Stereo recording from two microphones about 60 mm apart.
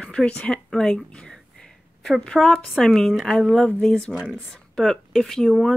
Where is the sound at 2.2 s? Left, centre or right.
Centre.